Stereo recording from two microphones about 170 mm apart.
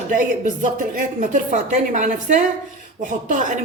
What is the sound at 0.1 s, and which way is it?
A woman's voice, 50° right (ahead or behind).